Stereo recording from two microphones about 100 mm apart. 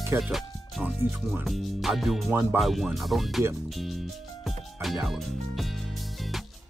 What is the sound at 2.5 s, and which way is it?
Speech, centre (ahead or behind).